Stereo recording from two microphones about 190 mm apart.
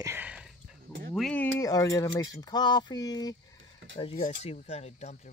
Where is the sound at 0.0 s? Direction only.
10° right (ahead or behind).